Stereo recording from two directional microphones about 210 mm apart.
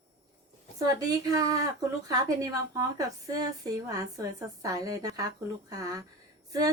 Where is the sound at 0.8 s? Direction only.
15° right (ahead or behind).